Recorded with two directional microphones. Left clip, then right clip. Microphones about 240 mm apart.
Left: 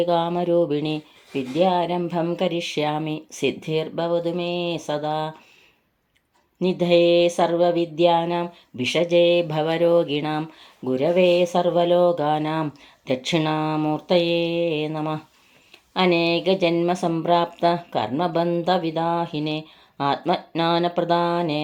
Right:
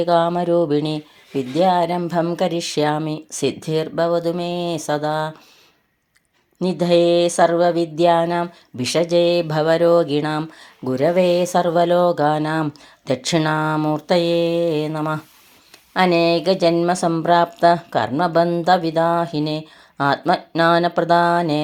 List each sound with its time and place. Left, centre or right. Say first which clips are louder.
0.0 s speech: right 4 dB; right
6.6 s speech: right 2 dB; right